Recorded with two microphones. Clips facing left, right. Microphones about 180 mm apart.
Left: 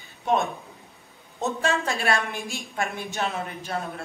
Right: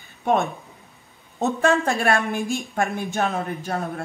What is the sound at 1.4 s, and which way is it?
A woman's voice, 60° right (ahead or behind).